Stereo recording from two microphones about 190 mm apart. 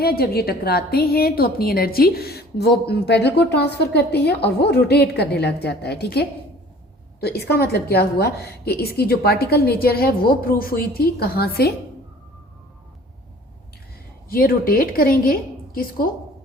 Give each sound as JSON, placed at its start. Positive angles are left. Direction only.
{"t": 0.0, "sound": "a woman's voice", "side_deg": 55}
{"t": 14.3, "sound": "a woman's voice", "side_deg": 50}